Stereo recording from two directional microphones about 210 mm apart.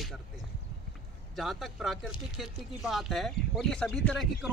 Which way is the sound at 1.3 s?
Centre (ahead or behind).